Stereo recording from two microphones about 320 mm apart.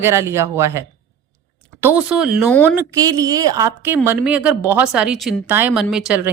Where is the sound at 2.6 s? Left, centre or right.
Centre.